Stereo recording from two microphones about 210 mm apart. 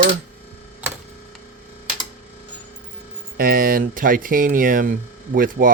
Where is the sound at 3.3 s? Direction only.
45° right (ahead or behind).